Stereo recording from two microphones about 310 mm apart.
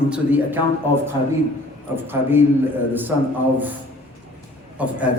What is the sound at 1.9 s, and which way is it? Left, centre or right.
Speech, centre.